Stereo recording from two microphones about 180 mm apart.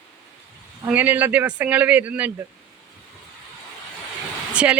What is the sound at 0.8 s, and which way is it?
Speech, 10° right (ahead or behind).